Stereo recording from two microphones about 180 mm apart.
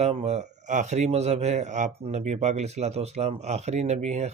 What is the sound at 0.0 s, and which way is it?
Speech, 35° right (ahead or behind).